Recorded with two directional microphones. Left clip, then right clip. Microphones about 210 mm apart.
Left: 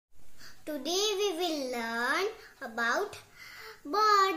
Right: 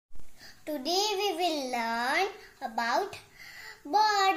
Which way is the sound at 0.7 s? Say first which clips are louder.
Right 2 dB; 15° left (ahead or behind).